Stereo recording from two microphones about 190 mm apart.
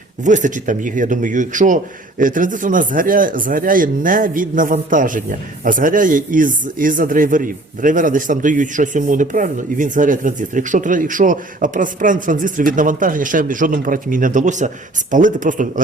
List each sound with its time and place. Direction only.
0.3 s a man's voice: 40° right (ahead or behind)